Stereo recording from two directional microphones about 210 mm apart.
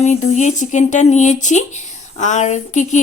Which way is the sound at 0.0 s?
35° left (ahead or behind).